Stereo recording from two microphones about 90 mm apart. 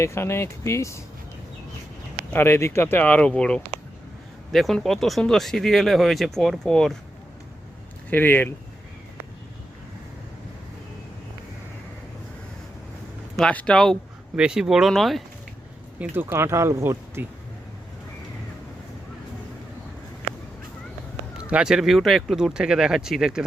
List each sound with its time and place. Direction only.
0.0 s speech: 30° left (ahead or behind)
2.3 s speech: 25° left (ahead or behind); by 6.9 s 5° left (ahead or behind)
8.1 s speech: 20° left (ahead or behind)
13.5 s speech: 15° left (ahead or behind)
13.7 s speech: 5° left (ahead or behind)
14.3 s speech: 10° right (ahead or behind)
16.0 s speech: 25° right (ahead or behind)
21.3 s speech: 10° right (ahead or behind)